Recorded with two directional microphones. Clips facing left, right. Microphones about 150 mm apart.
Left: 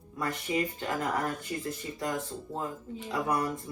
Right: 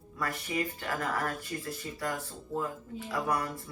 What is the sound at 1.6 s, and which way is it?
Speech, 20° left (ahead or behind).